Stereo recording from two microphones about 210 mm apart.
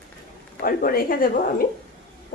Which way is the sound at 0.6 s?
45° left (ahead or behind).